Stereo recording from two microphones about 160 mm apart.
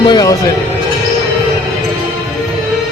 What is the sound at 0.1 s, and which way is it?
Speech, 25° left (ahead or behind).